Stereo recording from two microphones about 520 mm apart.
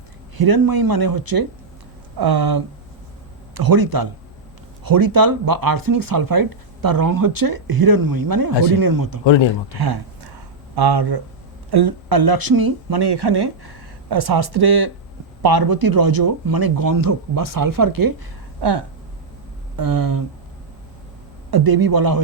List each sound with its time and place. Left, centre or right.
0.3 s speech: right
9.2 s speech: left
9.7 s a sound: right
11.7 s speech: right
18.6 s speech: right
19.7 s speech: right
21.5 s speech: right